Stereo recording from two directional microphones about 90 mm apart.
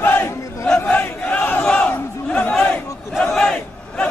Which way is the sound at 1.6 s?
15° left (ahead or behind).